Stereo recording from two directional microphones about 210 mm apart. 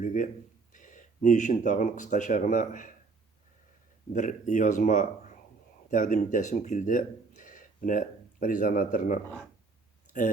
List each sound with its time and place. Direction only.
0.0 s a sound: 40° left (ahead or behind)
0.7 s speech: 40° left (ahead or behind)
4.1 s speech: 35° left (ahead or behind)